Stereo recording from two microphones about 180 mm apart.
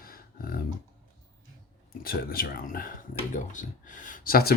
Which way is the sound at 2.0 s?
55° left (ahead or behind).